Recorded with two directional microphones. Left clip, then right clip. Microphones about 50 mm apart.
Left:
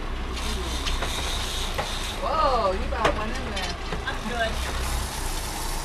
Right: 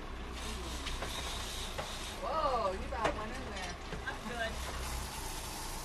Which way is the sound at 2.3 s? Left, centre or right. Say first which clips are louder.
Left 10 dB; right.